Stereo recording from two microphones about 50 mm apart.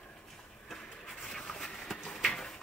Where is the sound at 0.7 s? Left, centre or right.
Centre.